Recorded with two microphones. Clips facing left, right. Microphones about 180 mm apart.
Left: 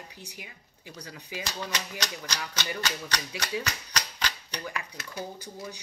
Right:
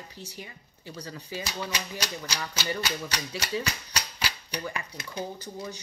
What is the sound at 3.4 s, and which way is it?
Typewriter, 10° right (ahead or behind).